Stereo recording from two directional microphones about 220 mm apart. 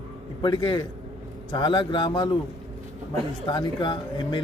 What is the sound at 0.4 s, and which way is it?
A man's voice, 20° left (ahead or behind).